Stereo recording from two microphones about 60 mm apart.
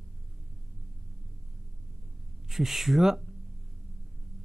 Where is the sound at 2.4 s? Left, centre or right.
Centre.